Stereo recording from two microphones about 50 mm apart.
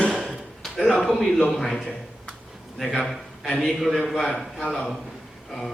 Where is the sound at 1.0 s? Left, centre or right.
Centre.